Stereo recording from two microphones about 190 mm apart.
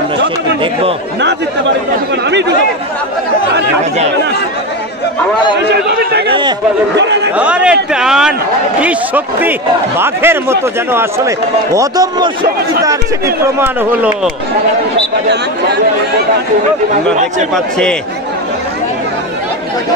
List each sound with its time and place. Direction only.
2.2 s chatter: 65° right (ahead or behind)
5.7 s a man's voice: 60° right (ahead or behind)
7.3 s a man's voice: 5° right (ahead or behind)
13.6 s speech: 10° right (ahead or behind)